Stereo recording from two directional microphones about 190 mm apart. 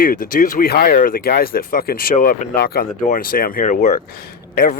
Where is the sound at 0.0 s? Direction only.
50° left (ahead or behind).